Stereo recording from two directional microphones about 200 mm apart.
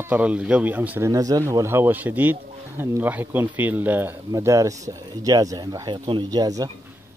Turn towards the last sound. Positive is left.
turn(degrees=-20)  # may be behind; listen again after turning